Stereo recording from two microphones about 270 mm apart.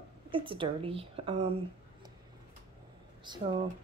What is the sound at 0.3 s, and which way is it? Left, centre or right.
A woman's voice, centre.